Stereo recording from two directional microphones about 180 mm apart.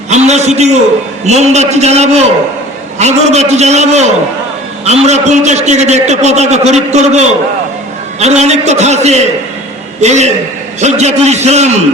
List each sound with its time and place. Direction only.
0.1 s a man's voice: 40° right (ahead or behind)